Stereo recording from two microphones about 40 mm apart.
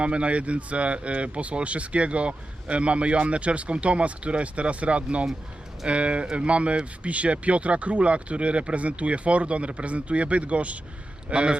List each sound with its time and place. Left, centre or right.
0.0 s speech: right